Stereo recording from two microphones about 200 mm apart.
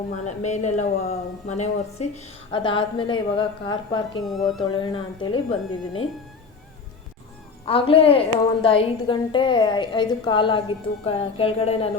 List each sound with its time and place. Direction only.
0.3 s a woman's voice: 35° left (ahead or behind)
4.2 s speech: centre (ahead or behind)
4.6 s a woman's voice: 25° left (ahead or behind)
7.6 s a woman's voice: 25° left (ahead or behind)